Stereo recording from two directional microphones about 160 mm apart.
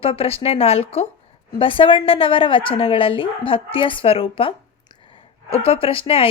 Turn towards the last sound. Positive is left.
turn(degrees=35)  # may be behind; listen again after turning